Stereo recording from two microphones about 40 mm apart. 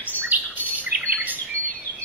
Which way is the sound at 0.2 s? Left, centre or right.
Right.